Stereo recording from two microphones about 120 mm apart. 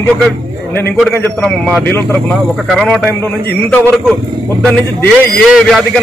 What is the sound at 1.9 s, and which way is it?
Speech, 20° left (ahead or behind).